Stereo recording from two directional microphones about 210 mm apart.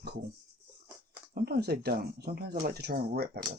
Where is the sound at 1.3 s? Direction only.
50° right (ahead or behind).